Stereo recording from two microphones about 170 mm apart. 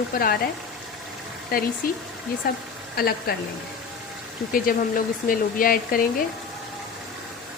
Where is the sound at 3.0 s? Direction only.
65° left (ahead or behind).